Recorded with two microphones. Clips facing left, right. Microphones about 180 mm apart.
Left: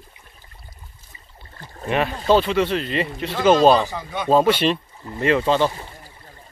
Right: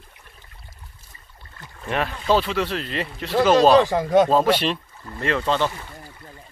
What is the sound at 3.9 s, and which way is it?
Speech, 90° right.